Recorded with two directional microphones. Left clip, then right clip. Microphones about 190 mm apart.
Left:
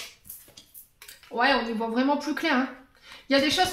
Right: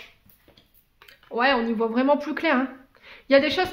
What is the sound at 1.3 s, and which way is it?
Speech, 40° right (ahead or behind).